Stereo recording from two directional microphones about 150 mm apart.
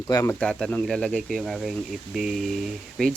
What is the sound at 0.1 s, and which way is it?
Speech, 20° left (ahead or behind).